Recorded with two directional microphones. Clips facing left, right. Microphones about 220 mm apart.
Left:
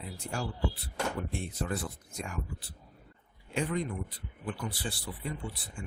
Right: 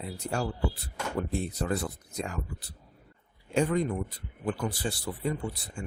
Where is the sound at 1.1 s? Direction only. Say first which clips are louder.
Right 5 dB; 40° right (ahead or behind).